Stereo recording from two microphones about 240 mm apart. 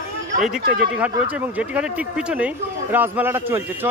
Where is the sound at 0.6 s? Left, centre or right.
Right.